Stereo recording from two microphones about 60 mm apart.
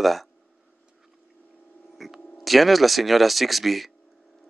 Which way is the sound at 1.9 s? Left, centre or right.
Centre.